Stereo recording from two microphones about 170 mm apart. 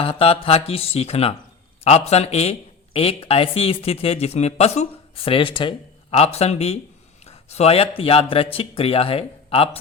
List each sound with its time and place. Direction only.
0.0 s speech: 35° left (ahead or behind)